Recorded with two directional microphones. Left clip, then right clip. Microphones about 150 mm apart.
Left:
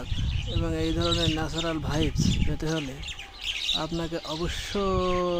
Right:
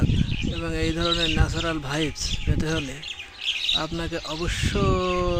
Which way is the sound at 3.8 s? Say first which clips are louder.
Right 2 dB; centre (ahead or behind).